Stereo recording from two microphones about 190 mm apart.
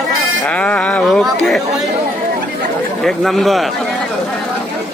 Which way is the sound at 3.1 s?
Centre (ahead or behind).